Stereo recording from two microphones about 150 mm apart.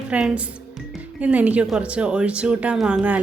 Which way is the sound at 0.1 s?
5° right (ahead or behind).